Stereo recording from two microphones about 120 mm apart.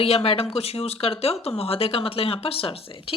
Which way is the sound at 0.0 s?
55° left (ahead or behind).